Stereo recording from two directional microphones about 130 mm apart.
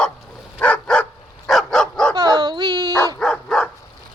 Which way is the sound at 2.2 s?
35° right (ahead or behind).